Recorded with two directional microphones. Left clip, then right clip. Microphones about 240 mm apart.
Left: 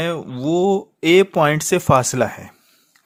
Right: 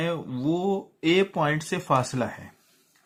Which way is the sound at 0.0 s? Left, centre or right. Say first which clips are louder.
Left 5 dB; left.